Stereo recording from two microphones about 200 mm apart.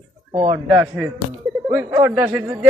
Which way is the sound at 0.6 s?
10° right (ahead or behind).